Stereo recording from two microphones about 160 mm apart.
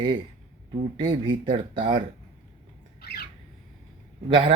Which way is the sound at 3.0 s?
75° left (ahead or behind).